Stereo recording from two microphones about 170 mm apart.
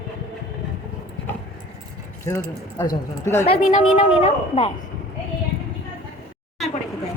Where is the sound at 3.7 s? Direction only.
40° left (ahead or behind).